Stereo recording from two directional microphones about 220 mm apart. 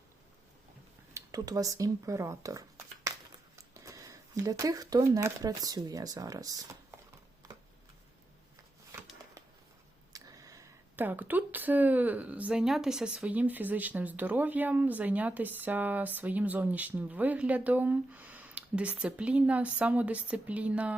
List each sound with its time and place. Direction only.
1.1 s speech: 15° right (ahead or behind)
10.1 s speech: 15° right (ahead or behind)